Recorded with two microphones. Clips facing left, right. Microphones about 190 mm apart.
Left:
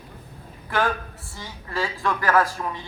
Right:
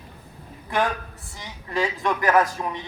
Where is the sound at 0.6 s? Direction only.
20° right (ahead or behind).